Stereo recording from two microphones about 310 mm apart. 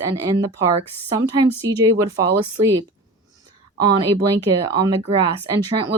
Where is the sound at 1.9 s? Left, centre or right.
Centre.